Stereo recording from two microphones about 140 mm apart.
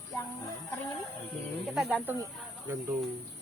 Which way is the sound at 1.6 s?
Centre (ahead or behind).